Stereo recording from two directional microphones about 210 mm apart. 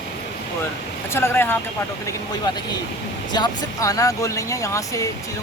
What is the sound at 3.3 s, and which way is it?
Speech, 20° left (ahead or behind).